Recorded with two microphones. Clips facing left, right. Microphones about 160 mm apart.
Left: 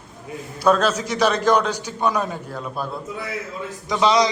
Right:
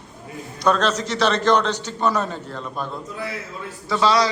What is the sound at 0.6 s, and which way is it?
A man's voice, 10° left (ahead or behind).